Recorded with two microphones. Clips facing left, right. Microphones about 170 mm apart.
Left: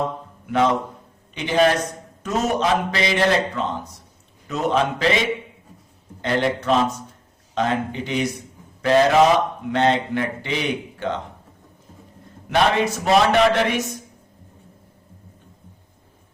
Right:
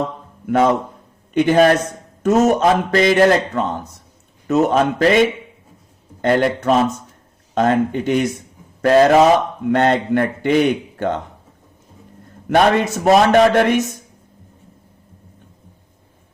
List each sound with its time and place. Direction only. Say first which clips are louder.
0.4 s a man's voice: right 4 dB; 45° right (ahead or behind)
6.2 s a man's voice: right 5 dB; 50° right (ahead or behind)
12.5 s a man's voice: right 4 dB; 50° right (ahead or behind)